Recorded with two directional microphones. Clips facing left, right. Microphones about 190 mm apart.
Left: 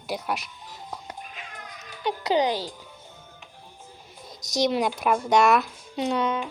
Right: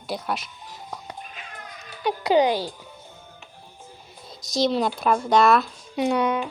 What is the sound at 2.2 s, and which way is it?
Speech, 10° right (ahead or behind).